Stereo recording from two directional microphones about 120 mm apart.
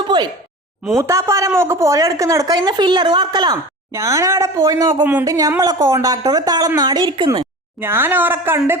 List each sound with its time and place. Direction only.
0.1 s speech: 40° right (ahead or behind)
0.9 s a woman's voice: 20° right (ahead or behind); by 7.3 s 40° right (ahead or behind)
7.8 s a woman's voice: 20° right (ahead or behind)